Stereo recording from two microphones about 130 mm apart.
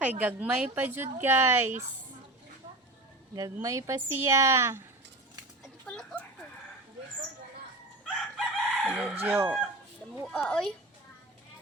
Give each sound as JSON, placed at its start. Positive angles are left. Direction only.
{"t": 0.2, "sound": "a woman's voice", "side_deg": -10}
{"t": 3.3, "sound": "a woman's voice", "side_deg": -25}
{"t": 5.6, "sound": "a sound", "side_deg": 5}
{"t": 8.0, "sound": "chicken", "side_deg": 0}
{"t": 9.2, "sound": "a woman's voice", "side_deg": -15}
{"t": 10.2, "sound": "a child's voice", "side_deg": 5}